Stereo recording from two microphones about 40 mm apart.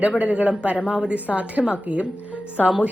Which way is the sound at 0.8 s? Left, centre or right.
Right.